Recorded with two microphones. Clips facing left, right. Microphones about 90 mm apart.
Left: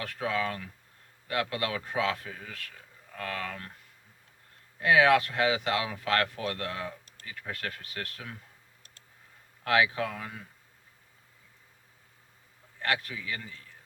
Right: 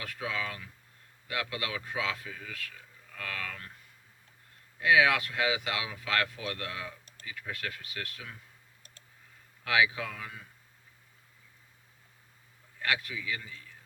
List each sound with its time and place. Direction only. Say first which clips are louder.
0.0 s speech: left 5 dB; 45° left (ahead or behind)
4.8 s speech: left 3 dB; 40° left (ahead or behind)
9.6 s speech: left 2 dB; 40° left (ahead or behind)
12.8 s speech: left 1 dB; 40° left (ahead or behind)